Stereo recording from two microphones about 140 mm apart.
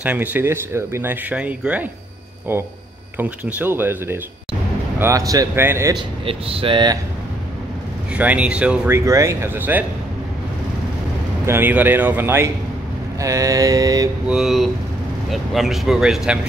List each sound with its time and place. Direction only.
0.0 s speech: 10° right (ahead or behind)
1.3 s speech: 10° right (ahead or behind)
5.9 s speech: 40° right (ahead or behind)
8.1 s speech: 10° right (ahead or behind)
11.4 s speech: 15° right (ahead or behind)
14.2 s speech: 5° right (ahead or behind)